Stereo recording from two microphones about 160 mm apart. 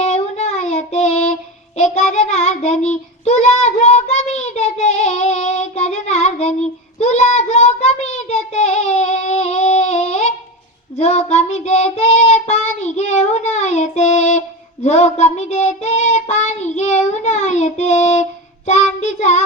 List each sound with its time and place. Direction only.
0.0 s child singing: 40° left (ahead or behind)